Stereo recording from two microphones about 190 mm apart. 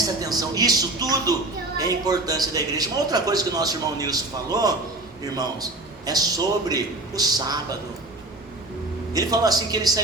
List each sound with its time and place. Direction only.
0.0 s a man's voice: 20° right (ahead or behind)
9.1 s a man's voice: 20° right (ahead or behind)